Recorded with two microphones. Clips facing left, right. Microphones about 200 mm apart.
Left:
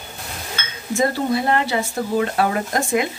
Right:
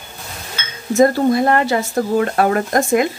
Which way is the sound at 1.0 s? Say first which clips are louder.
Right 7 dB; 50° right (ahead or behind).